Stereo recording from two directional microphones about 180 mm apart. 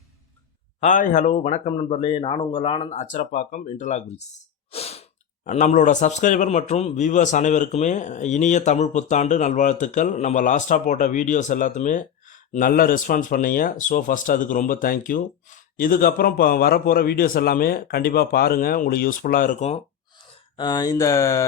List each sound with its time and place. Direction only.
0.8 s a man's voice: 45° left (ahead or behind)
4.7 s sneeze: 35° left (ahead or behind)
5.5 s a man's voice: 40° left (ahead or behind)
20.6 s speech: 25° left (ahead or behind)